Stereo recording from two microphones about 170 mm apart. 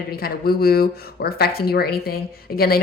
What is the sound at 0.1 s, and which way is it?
A woman's voice, 65° left (ahead or behind).